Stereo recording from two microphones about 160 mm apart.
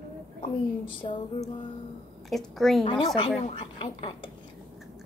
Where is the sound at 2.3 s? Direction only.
Centre (ahead or behind).